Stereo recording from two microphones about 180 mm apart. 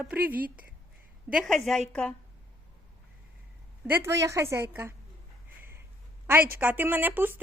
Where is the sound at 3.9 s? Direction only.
15° right (ahead or behind).